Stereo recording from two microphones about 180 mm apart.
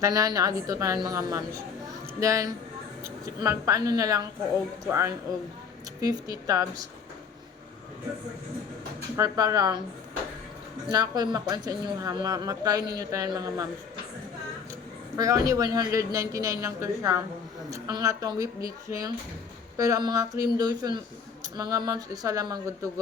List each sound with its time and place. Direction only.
0.0 s a woman's voice: 20° right (ahead or behind)
9.1 s a woman's voice: 20° right (ahead or behind)
10.8 s a woman's voice: 20° right (ahead or behind)
15.1 s a man's voice: 20° right (ahead or behind)